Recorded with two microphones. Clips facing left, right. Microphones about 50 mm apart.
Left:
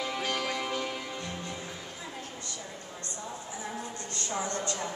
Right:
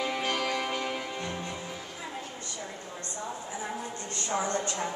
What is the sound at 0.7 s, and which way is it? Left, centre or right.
Music, centre.